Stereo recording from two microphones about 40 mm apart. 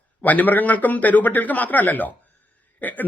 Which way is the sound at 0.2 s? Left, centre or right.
Left.